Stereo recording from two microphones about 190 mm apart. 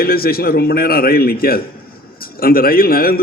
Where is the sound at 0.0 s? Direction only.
50° left (ahead or behind).